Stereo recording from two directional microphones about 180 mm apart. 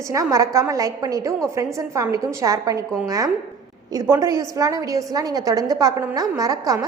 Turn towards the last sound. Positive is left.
turn(degrees=-20)  # may be behind; listen again after turning